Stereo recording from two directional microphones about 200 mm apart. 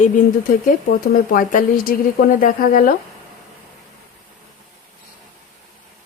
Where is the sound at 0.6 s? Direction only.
45° left (ahead or behind).